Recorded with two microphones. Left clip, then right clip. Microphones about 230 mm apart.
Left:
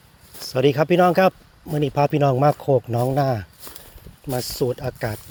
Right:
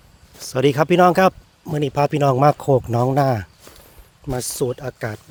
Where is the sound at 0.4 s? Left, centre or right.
Centre.